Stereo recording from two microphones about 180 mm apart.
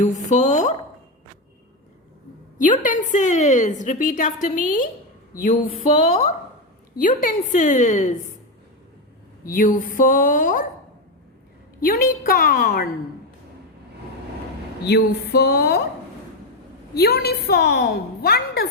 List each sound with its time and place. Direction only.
0.0 s speech: 45° left (ahead or behind)
2.6 s a woman's voice: 45° left (ahead or behind)
7.0 s a woman's voice: 50° left (ahead or behind)
9.5 s a woman's voice: 50° left (ahead or behind)
11.8 s a woman's voice: 50° left (ahead or behind)
14.8 s a woman's voice: 65° left (ahead or behind)
16.9 s a woman's voice: 65° left (ahead or behind)